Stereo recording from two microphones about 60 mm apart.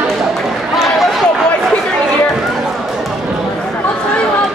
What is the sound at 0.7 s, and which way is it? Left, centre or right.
Run, centre.